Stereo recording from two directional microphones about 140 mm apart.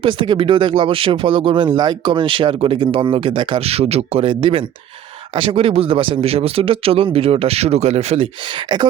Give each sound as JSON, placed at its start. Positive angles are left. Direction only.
{"t": 0.0, "sound": "speech", "side_deg": -35}